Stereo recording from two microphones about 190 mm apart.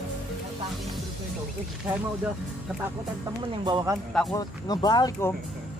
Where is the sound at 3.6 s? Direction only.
20° right (ahead or behind).